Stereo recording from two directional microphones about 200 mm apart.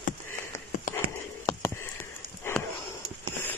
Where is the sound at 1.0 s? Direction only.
45° right (ahead or behind).